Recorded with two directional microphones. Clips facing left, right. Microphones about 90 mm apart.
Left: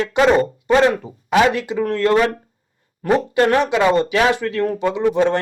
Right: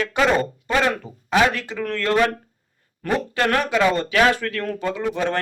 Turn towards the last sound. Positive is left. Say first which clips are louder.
# left 7 dB
turn(degrees=20)  # may be behind; listen again after turning